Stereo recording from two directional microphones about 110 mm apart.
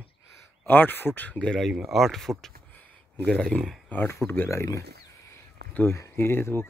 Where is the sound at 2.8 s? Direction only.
5° left (ahead or behind).